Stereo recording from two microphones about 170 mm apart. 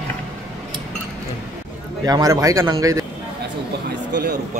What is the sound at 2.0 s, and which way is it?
Speech, 20° right (ahead or behind).